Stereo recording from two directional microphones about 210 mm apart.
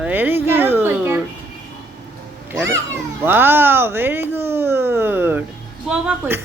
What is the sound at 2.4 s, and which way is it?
Cat, 15° right (ahead or behind).